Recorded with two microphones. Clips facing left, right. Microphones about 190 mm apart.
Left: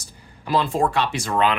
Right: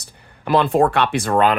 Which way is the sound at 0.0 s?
60° right (ahead or behind).